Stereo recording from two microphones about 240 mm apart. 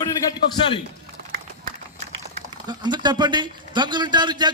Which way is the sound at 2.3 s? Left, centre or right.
Centre.